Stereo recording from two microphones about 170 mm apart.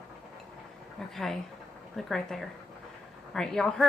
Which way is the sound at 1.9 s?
Centre (ahead or behind).